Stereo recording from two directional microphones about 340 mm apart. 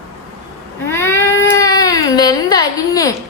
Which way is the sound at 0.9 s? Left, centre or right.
Centre.